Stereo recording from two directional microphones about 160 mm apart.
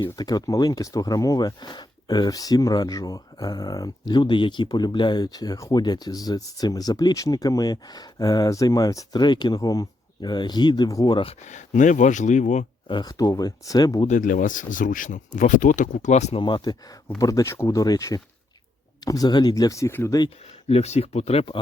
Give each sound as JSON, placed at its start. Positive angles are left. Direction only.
{"t": 0.0, "sound": "speech", "side_deg": 25}
{"t": 11.4, "sound": "speech", "side_deg": 50}
{"t": 12.9, "sound": "speech", "side_deg": 25}
{"t": 14.1, "sound": "speech", "side_deg": 55}
{"t": 16.4, "sound": "speech", "side_deg": 30}
{"t": 20.7, "sound": "speech", "side_deg": 40}